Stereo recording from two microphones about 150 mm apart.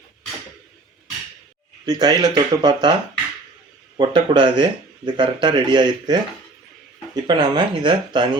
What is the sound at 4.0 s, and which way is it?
Speech, 35° right (ahead or behind).